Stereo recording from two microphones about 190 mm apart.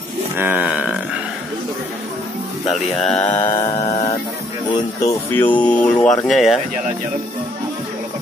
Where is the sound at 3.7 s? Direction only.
35° left (ahead or behind).